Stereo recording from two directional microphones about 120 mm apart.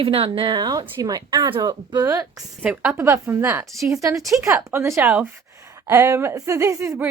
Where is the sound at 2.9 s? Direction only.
20° right (ahead or behind).